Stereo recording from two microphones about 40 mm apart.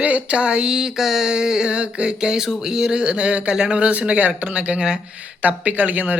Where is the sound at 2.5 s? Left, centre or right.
Centre.